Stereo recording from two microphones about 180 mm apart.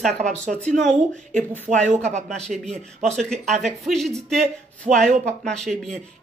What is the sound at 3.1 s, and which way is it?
Speech, 5° left (ahead or behind).